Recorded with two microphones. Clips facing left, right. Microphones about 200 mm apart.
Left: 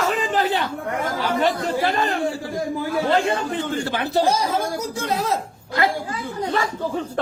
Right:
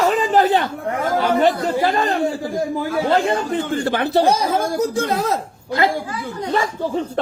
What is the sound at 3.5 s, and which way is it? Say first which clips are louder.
Speech: right 4 dB; 55° right (ahead or behind).